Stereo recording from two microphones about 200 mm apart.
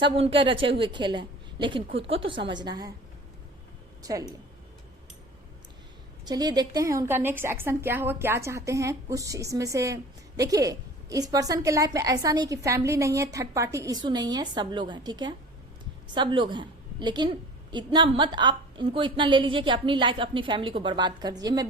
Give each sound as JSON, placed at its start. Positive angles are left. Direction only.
{"t": 0.0, "sound": "a woman's voice", "side_deg": -25}
{"t": 4.0, "sound": "a woman's voice", "side_deg": -15}
{"t": 6.2, "sound": "a woman's voice", "side_deg": -20}